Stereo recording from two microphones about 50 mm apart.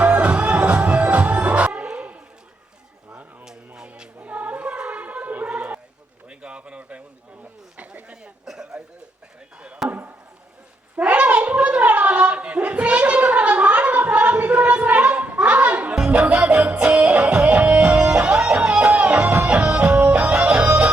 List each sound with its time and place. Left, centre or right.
0.0 s music: right
2.0 s a sound: right
4.2 s choir: right
5.5 s a sound: right
8.4 s cough: centre
9.6 s chop: right
9.9 s chop: right
10.9 s a sound: right
15.4 s music: right